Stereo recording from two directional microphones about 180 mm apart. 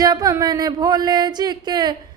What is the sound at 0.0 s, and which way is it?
Music, 20° right (ahead or behind).